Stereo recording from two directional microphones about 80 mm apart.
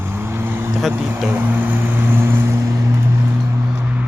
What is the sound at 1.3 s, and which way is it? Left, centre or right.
Vehicle, right.